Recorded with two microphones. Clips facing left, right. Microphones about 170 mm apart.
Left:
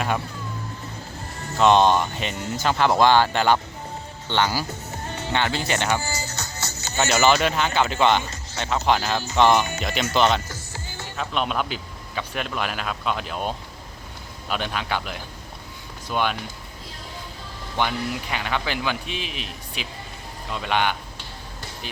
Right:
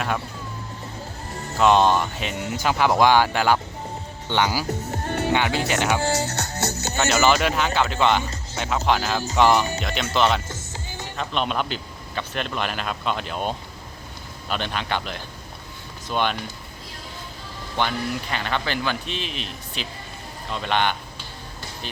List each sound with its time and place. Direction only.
1.5 s speech: 5° right (ahead or behind)
5.0 s music: 65° right (ahead or behind)
5.3 s speech: 10° right (ahead or behind)
6.0 s music: 75° right (ahead or behind)
7.0 s speech: centre (ahead or behind)
10.5 s music: 20° right (ahead or behind)
11.2 s a man's voice: 5° left (ahead or behind)
17.7 s a man's voice: 10° left (ahead or behind)